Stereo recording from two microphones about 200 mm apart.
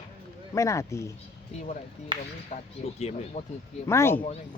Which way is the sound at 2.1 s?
25° right (ahead or behind).